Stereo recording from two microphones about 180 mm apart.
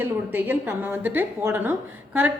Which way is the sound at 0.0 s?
10° right (ahead or behind).